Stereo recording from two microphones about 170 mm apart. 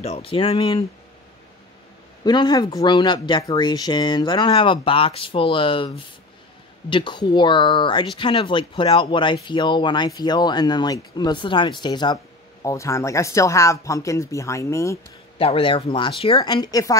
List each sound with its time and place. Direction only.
0.0 s speech: 35° left (ahead or behind)
2.2 s speech: 25° left (ahead or behind)
15.3 s speech: 35° left (ahead or behind)